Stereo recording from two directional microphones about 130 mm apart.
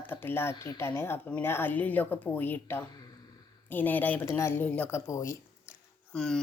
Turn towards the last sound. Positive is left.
turn(degrees=5)  # may be behind; listen again after turning